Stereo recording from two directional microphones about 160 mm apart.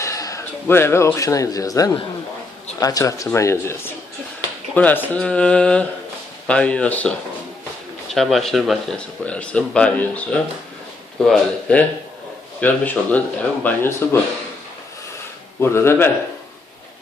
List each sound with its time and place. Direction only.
0.0 s speech: 20° left (ahead or behind)
8.1 s speech: centre (ahead or behind)
15.6 s speech: 15° left (ahead or behind)